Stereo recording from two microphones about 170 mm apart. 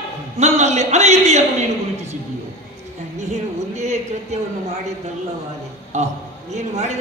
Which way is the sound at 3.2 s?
40° right (ahead or behind).